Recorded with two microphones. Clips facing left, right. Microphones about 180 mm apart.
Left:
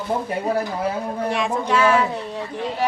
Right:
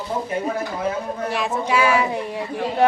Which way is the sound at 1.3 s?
5° right (ahead or behind).